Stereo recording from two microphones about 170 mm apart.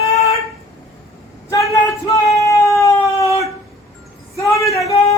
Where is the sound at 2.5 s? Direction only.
15° left (ahead or behind).